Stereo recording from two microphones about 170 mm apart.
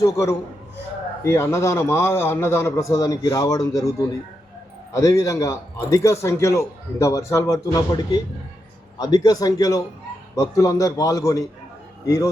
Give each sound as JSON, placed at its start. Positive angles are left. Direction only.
{"t": 0.0, "sound": "a man's voice", "side_deg": 15}